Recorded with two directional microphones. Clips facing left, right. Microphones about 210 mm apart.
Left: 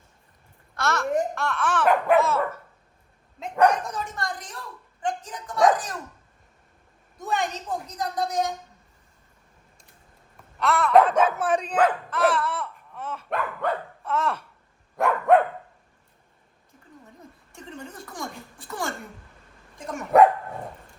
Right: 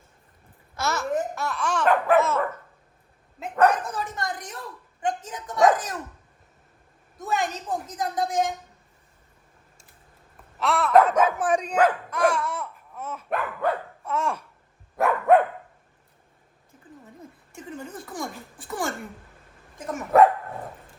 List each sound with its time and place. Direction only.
0.8 s a child's voice: centre (ahead or behind)
1.4 s laughter: centre (ahead or behind)
2.1 s dog: 10° left (ahead or behind)
3.4 s laughter: 5° right (ahead or behind)
4.1 s speech: 20° right (ahead or behind)
7.2 s laughter: centre (ahead or behind)
10.3 s a sound: centre (ahead or behind)
11.0 s speech: 30° left (ahead or behind)
11.3 s speech: 15° right (ahead or behind)
14.9 s dog: centre (ahead or behind)
17.5 s a sound: centre (ahead or behind)
19.9 s laughter: centre (ahead or behind)